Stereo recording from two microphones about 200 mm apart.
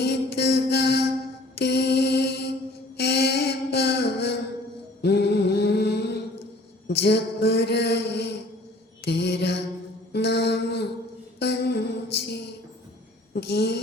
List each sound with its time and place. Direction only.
0.0 s music: 55° left (ahead or behind)
1.5 s mantra: 55° left (ahead or behind)
3.0 s a sound: 55° left (ahead or behind)
5.0 s mantra: 55° left (ahead or behind)
11.3 s music: 55° left (ahead or behind)
13.3 s a sound: 55° left (ahead or behind)